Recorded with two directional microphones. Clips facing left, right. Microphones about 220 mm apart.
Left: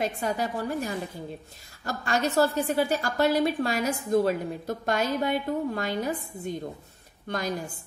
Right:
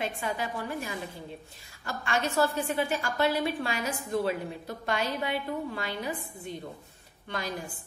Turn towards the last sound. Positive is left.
turn(degrees=45)  # may be behind; listen again after turning